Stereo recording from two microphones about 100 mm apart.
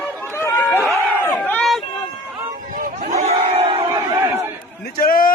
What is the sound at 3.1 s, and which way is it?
Battle cry, 90° right.